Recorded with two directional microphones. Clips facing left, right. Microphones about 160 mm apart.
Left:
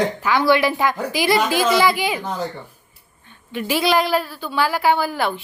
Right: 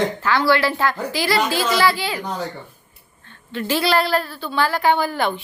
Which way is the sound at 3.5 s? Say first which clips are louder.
Left 1 dB; 10° left (ahead or behind).